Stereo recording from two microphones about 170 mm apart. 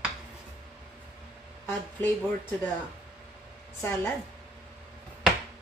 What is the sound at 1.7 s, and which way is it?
Speech, 10° left (ahead or behind).